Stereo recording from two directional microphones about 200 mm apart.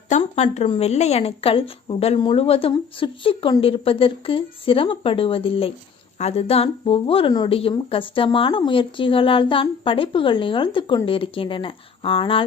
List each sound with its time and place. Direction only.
0.1 s a woman's voice: 35° left (ahead or behind)